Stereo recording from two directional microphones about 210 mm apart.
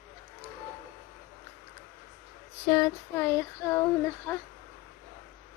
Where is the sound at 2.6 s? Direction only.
20° left (ahead or behind).